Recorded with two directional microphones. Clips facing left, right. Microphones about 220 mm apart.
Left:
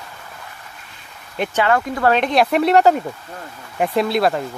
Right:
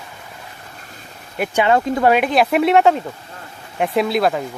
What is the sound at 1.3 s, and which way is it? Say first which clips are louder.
Speech: right 1 dB; 5° right (ahead or behind).